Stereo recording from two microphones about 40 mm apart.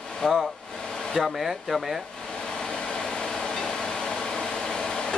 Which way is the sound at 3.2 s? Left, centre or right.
Centre.